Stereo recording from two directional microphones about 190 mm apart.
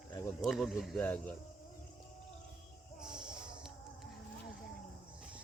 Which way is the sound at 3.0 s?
5° right (ahead or behind).